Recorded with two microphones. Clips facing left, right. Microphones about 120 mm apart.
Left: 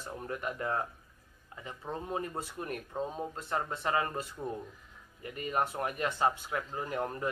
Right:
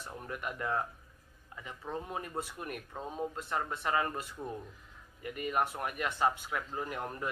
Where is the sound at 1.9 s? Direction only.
30° left (ahead or behind).